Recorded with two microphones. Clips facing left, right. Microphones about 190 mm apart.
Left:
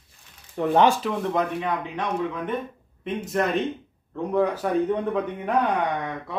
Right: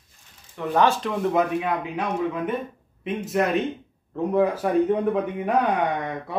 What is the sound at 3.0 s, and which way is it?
Speech, centre (ahead or behind).